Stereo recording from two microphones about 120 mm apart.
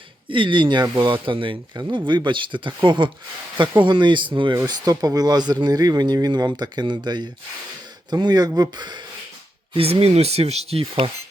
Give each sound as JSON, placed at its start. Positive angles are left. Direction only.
{"t": 0.3, "sound": "speech", "side_deg": -45}
{"t": 4.5, "sound": "speech", "side_deg": -30}
{"t": 9.7, "sound": "speech", "side_deg": -55}